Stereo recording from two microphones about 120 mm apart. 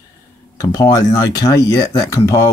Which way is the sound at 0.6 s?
30° left (ahead or behind).